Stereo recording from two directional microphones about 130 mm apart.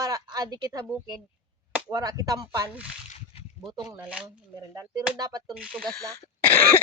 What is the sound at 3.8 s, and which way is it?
Speech, 15° right (ahead or behind).